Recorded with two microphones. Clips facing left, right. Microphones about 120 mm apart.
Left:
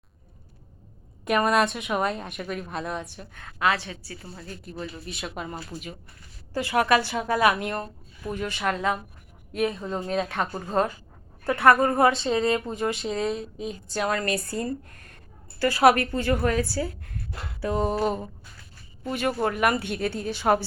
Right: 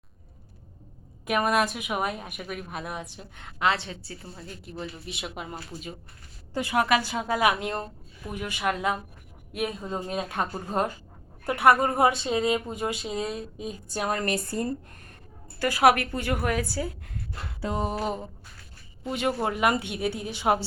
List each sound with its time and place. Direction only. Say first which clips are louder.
1.2 s a woman's voice: left 2 dB; 5° right (ahead or behind)
6.5 s a woman's voice: left 2 dB; 20° right (ahead or behind)
19.0 s a woman's voice: left 1 dB; 20° right (ahead or behind)